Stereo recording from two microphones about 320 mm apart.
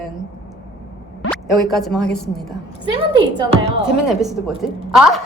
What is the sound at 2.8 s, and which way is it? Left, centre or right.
Speech, centre.